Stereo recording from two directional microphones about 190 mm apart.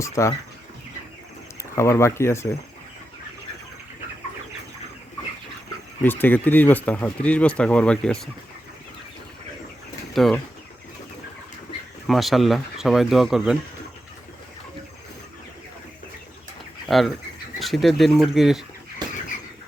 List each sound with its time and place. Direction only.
0.0 s speech: 15° left (ahead or behind)
1.7 s speech: 15° left (ahead or behind)
6.0 s speech: 10° left (ahead or behind)
10.2 s speech: centre (ahead or behind)
12.0 s speech: centre (ahead or behind)
16.9 s speech: centre (ahead or behind)
19.0 s bird flight: 20° right (ahead or behind)